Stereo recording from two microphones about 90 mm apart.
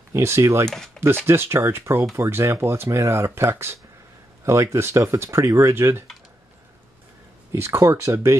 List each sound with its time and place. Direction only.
0.1 s speech: 30° right (ahead or behind)
7.5 s speech: 30° right (ahead or behind)